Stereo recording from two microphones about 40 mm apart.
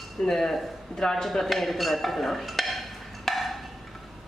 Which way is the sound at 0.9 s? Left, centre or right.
Centre.